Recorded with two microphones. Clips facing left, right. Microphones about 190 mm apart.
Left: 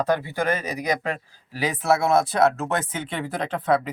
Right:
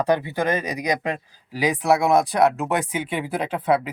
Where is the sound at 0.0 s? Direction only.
15° right (ahead or behind).